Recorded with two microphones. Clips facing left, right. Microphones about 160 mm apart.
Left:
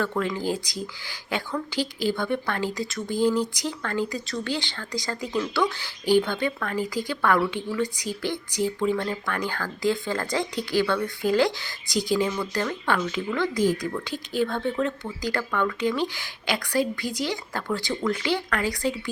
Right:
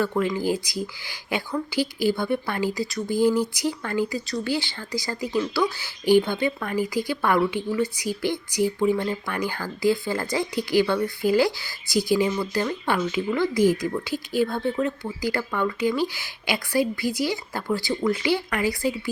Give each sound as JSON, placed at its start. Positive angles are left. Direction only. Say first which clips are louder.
{"t": 0.0, "sound": "speech", "louder": "right 3 dB", "side_deg": -10}